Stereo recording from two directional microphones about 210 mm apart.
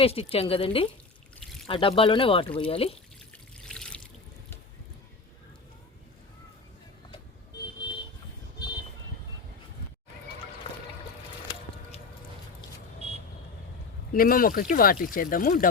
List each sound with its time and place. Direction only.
0.0 s speech: 30° left (ahead or behind)
3.3 s water: 5° left (ahead or behind)
14.1 s speech: 45° left (ahead or behind)